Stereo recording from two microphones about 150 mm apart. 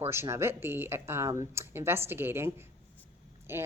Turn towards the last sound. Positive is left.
turn(degrees=-15)  # may be behind; listen again after turning